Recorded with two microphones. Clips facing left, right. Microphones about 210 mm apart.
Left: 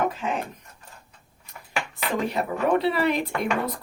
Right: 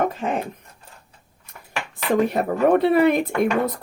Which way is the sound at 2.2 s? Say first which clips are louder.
Right 4 dB; 50° right (ahead or behind).